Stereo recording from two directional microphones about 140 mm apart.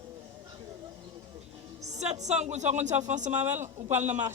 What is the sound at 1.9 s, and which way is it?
A woman's voice, 55° right (ahead or behind).